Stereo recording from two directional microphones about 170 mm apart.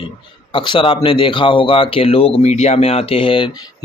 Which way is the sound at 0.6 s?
30° left (ahead or behind).